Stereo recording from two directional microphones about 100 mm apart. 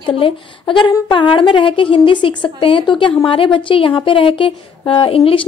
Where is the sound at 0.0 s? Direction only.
60° left (ahead or behind).